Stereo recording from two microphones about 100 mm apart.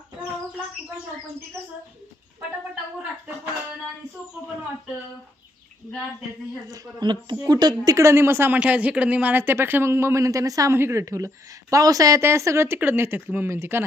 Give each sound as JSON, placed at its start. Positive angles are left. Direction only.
{"t": 6.7, "sound": "a woman's voice", "side_deg": -45}
{"t": 7.9, "sound": "speech", "side_deg": -25}
{"t": 8.5, "sound": "speech", "side_deg": -10}